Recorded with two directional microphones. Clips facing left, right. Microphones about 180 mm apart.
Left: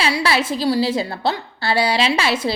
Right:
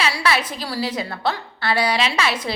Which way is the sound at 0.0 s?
30° left (ahead or behind).